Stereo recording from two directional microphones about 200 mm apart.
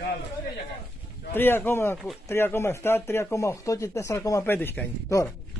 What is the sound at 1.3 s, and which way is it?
Speech, 10° left (ahead or behind).